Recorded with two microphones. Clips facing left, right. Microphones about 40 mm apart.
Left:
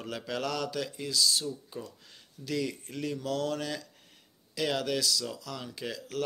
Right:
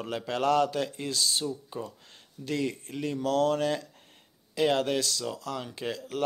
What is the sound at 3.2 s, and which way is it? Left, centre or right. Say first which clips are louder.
Speech: right 9 dB; right.